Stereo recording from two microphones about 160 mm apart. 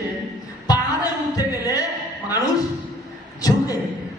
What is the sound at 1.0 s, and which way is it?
Speech, 25° left (ahead or behind).